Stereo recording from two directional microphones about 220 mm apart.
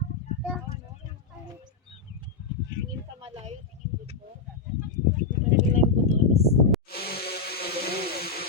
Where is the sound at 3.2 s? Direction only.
25° right (ahead or behind).